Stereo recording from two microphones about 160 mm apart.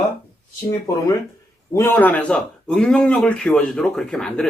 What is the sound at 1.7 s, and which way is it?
A man's voice, 15° left (ahead or behind).